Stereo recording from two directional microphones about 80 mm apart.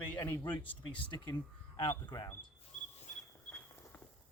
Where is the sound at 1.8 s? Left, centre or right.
Left.